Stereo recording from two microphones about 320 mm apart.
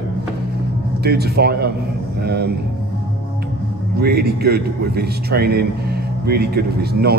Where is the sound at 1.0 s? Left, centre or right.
Right.